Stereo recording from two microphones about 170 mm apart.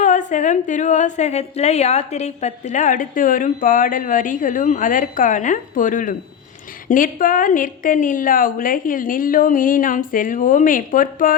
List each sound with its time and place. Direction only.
0.0 s a woman's voice: 45° left (ahead or behind)